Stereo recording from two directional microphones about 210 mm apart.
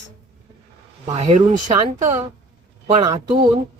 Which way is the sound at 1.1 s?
30° right (ahead or behind).